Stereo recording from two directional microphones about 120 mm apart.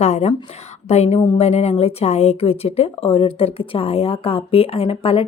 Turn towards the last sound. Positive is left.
turn(degrees=50)  # may be behind; listen again after turning